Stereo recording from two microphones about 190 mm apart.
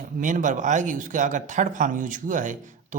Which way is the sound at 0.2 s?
40° right (ahead or behind).